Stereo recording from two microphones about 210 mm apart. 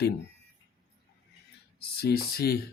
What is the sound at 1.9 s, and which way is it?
Speech, 50° left (ahead or behind).